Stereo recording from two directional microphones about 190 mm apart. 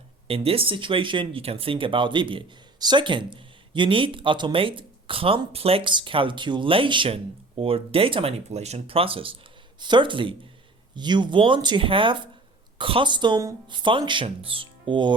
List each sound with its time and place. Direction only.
0.3 s speech: 30° right (ahead or behind)